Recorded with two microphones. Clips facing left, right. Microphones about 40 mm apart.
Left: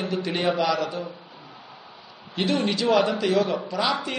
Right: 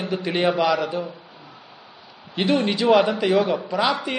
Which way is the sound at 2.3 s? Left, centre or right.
Centre.